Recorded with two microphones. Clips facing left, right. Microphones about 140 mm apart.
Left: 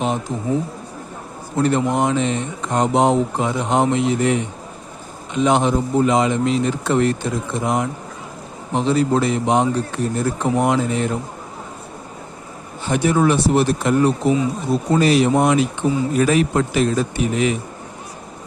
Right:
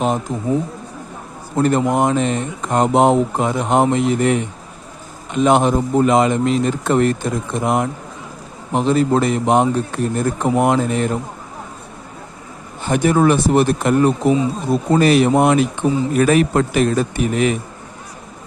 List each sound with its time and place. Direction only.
0.0 s speech: 45° right (ahead or behind)
1.6 s speech: 50° right (ahead or behind)
12.9 s speech: 50° right (ahead or behind)